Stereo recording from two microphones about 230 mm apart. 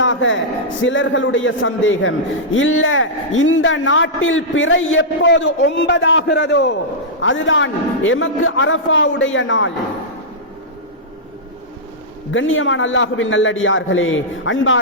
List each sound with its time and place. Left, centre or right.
0.0 s a sound: left
0.9 s a man's voice: left
12.3 s a man's voice: left